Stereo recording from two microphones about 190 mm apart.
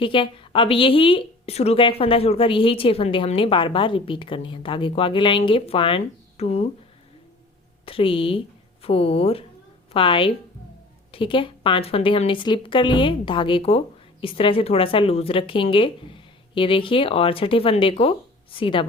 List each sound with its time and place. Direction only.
0.0 s a woman's voice: 25° left (ahead or behind)
7.9 s a woman's voice: 30° left (ahead or behind)